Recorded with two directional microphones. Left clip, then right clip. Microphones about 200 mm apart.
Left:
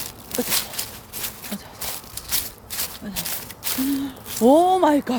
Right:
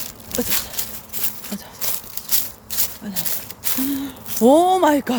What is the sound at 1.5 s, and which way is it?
Walk, centre (ahead or behind).